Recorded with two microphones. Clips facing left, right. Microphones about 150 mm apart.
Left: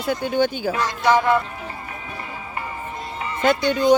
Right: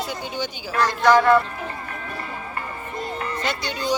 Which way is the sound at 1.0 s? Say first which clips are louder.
Right 2 dB; 10° left (ahead or behind).